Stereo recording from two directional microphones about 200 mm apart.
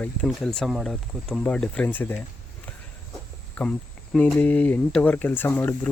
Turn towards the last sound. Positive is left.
turn(degrees=10)  # may be behind; listen again after turning